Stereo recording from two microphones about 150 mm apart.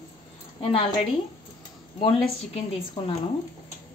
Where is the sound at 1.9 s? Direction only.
35° left (ahead or behind).